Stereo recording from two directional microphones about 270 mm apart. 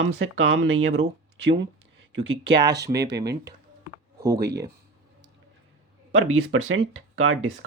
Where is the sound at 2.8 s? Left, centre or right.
Centre.